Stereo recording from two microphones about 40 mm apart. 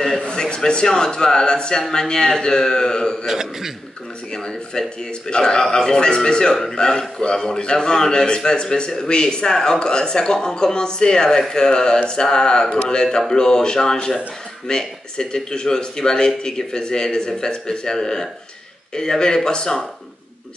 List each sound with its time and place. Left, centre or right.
0.2 s a man's voice: left
3.3 s a man's voice: centre
4.3 s a man's voice: centre